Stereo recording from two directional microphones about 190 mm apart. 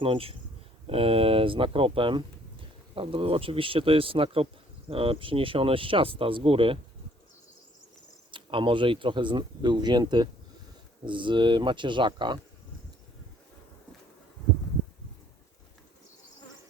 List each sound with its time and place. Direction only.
0.0 s speech: 30° right (ahead or behind)
8.3 s speech: 25° right (ahead or behind)